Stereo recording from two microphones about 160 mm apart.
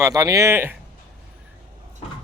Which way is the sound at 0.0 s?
20° right (ahead or behind).